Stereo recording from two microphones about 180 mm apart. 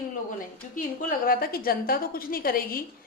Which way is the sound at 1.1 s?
55° left (ahead or behind).